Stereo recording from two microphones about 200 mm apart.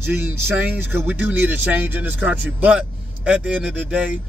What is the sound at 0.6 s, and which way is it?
Speech, 10° right (ahead or behind).